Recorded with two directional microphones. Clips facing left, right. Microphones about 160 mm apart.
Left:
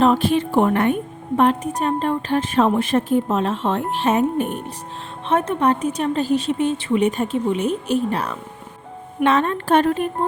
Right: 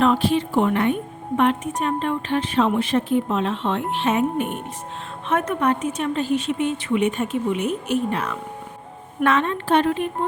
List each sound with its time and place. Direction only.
0.0 s speech: 45° left (ahead or behind)
1.4 s a woman's voice: 35° left (ahead or behind)